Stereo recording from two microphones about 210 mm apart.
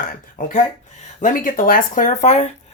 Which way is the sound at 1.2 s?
40° left (ahead or behind).